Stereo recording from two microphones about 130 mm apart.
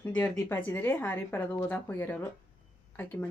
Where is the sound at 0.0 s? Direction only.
15° left (ahead or behind).